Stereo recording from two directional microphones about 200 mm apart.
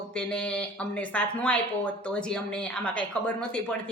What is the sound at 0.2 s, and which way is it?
A woman's voice, 5° left (ahead or behind).